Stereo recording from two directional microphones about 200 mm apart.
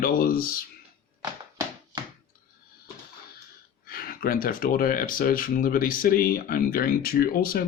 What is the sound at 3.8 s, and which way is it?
Speech, 45° left (ahead or behind).